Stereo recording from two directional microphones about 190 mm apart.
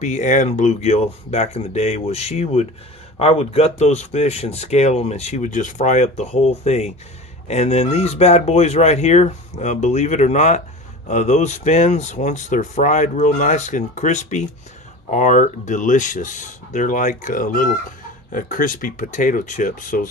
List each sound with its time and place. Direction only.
0.0 s speech: 40° left (ahead or behind)